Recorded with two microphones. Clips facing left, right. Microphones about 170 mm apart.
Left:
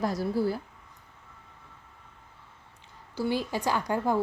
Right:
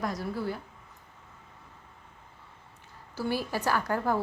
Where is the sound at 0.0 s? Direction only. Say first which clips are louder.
Left 5 dB; 30° left (ahead or behind).